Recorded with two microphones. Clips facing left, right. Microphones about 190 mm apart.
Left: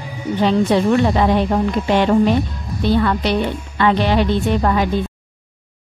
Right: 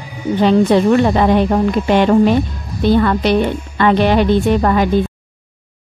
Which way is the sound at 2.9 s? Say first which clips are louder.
Right 4 dB; 55° right (ahead or behind).